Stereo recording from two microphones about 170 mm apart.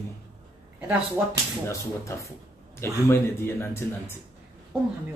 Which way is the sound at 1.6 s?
15° left (ahead or behind).